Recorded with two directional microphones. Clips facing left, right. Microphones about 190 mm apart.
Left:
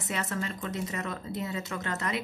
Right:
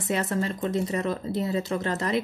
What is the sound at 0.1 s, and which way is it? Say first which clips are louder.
Speech: right 7 dB; 35° right (ahead or behind).